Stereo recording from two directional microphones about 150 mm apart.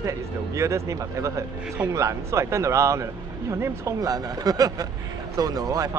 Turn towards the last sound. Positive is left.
turn(degrees=-25)  # may be behind; listen again after turning